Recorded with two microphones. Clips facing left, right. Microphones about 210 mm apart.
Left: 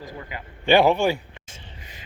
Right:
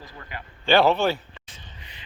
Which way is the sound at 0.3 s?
20° left (ahead or behind).